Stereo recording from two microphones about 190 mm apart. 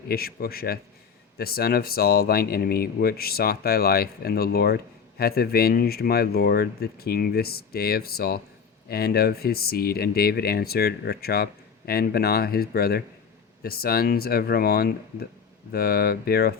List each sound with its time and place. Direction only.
0.1 s speech: 55° left (ahead or behind)